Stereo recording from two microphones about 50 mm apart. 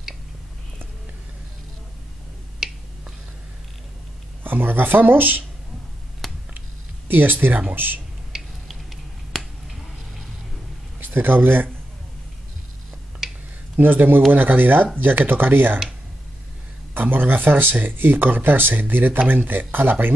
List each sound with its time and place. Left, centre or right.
2.6 s finger snapping: centre
4.4 s speech: right
6.2 s a sound: centre
7.1 s speech: right
9.3 s finger snapping: centre
11.0 s a man's voice: right
13.7 s speech: right
16.9 s speech: right